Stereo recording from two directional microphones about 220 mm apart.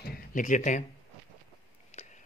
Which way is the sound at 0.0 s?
40° left (ahead or behind).